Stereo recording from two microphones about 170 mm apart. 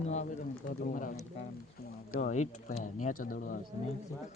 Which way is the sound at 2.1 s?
45° left (ahead or behind).